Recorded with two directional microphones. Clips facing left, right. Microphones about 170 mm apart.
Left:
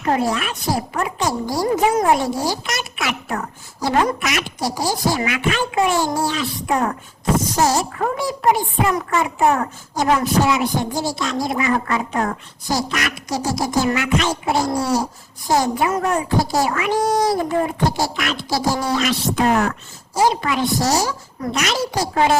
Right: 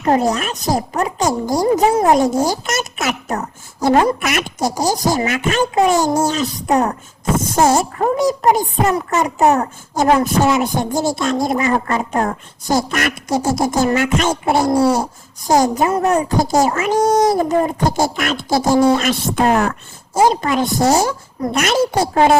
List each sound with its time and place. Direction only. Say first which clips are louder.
0.0 s speech: right 4 dB; 40° right (ahead or behind)
2.4 s speech: right 5 dB; 45° right (ahead or behind)
7.4 s speech: right 7 dB; 50° right (ahead or behind)
7.9 s speech: right 6 dB; 40° right (ahead or behind)
22.0 s speech: right 2 dB; 40° right (ahead or behind)